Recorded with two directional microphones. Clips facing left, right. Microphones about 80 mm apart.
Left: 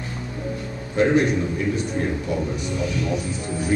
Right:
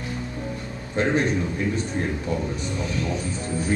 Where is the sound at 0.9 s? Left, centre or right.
Right.